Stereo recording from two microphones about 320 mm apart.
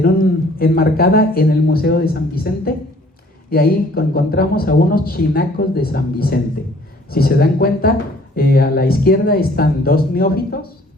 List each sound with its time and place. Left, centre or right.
0.0 s speech: left